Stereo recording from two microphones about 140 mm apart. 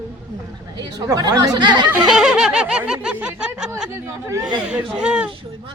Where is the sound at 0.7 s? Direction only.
30° right (ahead or behind).